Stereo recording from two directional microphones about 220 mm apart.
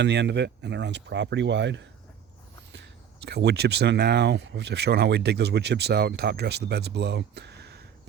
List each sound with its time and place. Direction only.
0.0 s speech: 50° right (ahead or behind)
3.2 s speech: 50° right (ahead or behind)